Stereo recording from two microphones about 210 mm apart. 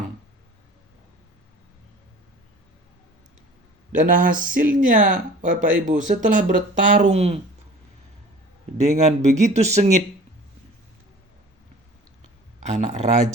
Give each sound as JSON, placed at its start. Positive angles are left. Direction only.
{"t": 3.9, "sound": "speech", "side_deg": -40}
{"t": 8.8, "sound": "speech", "side_deg": -35}
{"t": 12.6, "sound": "speech", "side_deg": -35}